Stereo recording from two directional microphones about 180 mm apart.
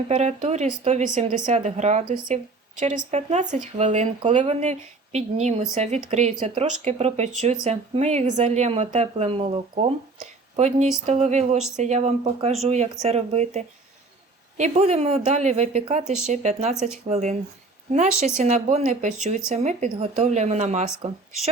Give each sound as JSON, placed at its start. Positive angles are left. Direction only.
{"t": 0.1, "sound": "speech", "side_deg": -40}
{"t": 10.2, "sound": "a sound", "side_deg": -40}
{"t": 11.0, "sound": "speech", "side_deg": -35}
{"t": 18.3, "sound": "speech", "side_deg": -40}